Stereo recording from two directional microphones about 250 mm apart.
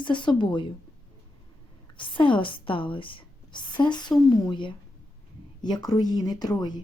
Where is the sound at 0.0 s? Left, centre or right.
Centre.